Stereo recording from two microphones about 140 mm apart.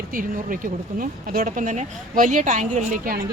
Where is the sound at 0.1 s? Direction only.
75° right (ahead or behind).